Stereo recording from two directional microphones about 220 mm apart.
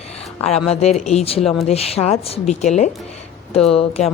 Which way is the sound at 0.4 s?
30° left (ahead or behind).